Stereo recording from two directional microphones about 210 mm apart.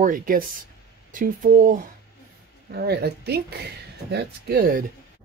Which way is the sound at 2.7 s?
50° right (ahead or behind).